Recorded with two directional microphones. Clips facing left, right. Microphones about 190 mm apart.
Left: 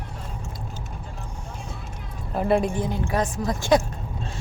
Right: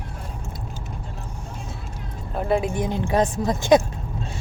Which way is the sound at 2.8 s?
20° right (ahead or behind).